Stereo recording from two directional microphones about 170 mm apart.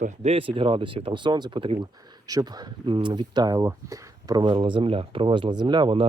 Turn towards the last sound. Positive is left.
turn(degrees=-30)  # may be behind; listen again after turning